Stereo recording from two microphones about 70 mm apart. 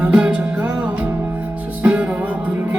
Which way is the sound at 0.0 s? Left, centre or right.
Centre.